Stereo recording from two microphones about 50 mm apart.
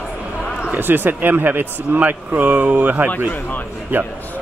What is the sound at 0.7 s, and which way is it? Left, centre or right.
A man's voice, right.